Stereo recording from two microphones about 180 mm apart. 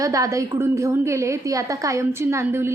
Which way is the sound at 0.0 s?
20° right (ahead or behind).